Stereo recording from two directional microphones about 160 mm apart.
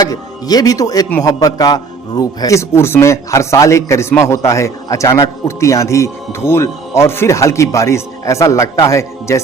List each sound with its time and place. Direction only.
0.0 s a man's voice: 25° left (ahead or behind)